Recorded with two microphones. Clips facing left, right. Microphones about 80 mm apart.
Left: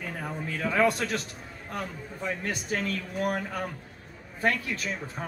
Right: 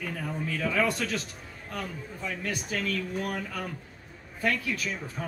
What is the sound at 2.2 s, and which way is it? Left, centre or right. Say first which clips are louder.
A man's voice: left 2 dB; left.